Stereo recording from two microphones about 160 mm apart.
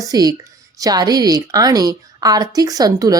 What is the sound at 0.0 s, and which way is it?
A woman's voice, 20° right (ahead or behind).